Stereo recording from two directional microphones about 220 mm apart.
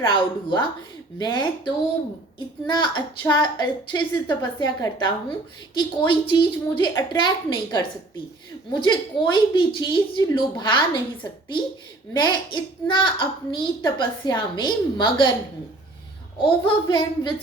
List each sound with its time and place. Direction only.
0.0 s a woman's voice: 20° left (ahead or behind)
2.6 s a woman's voice: 20° left (ahead or behind)
16.4 s a woman's voice: 20° left (ahead or behind)